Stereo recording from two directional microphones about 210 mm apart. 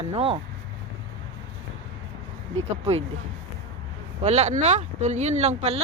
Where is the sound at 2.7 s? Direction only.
30° right (ahead or behind).